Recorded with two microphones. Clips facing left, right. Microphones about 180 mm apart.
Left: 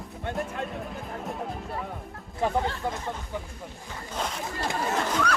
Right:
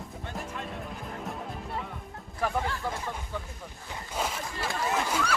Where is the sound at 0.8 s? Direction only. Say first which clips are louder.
Left 2 dB; centre (ahead or behind).